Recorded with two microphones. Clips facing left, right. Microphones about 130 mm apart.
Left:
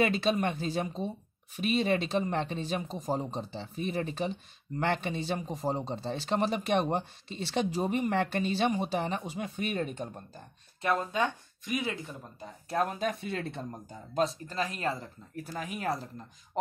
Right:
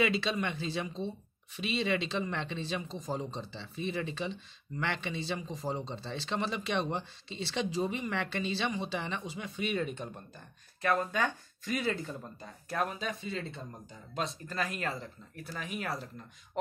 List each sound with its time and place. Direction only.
0.0 s a man's voice: 45° left (ahead or behind)
10.8 s speech: 20° left (ahead or behind)
12.6 s speech: 35° left (ahead or behind)
13.0 s speech: 55° left (ahead or behind)
14.5 s speech: 30° left (ahead or behind)